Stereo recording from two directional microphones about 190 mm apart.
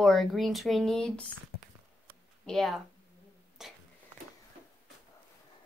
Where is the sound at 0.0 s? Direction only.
Centre (ahead or behind).